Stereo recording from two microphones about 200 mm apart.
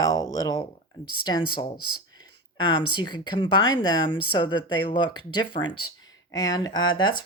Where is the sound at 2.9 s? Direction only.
25° left (ahead or behind).